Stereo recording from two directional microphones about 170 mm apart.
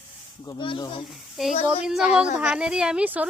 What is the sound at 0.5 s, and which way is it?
Speech, 30° left (ahead or behind).